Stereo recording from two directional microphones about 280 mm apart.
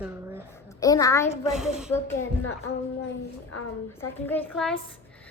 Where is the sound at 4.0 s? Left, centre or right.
Centre.